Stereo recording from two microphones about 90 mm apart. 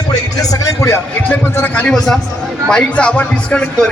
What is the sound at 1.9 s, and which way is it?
A man's voice, 5° left (ahead or behind).